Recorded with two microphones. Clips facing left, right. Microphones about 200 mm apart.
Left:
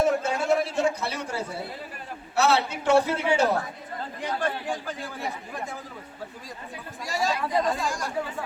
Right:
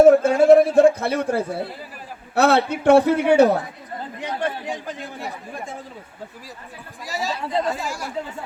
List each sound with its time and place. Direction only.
0.0 s a sound: 50° right (ahead or behind)
2.3 s a man's voice: 55° right (ahead or behind)
4.2 s speech: 20° right (ahead or behind)
7.0 s speech: centre (ahead or behind)